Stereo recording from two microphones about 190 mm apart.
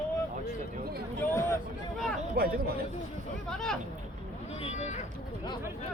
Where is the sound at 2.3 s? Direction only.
50° right (ahead or behind).